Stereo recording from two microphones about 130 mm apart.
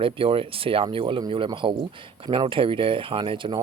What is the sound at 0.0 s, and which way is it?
Speech, 45° right (ahead or behind).